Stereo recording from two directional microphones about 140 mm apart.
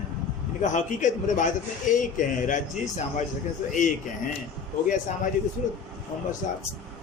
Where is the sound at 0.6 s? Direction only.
60° left (ahead or behind).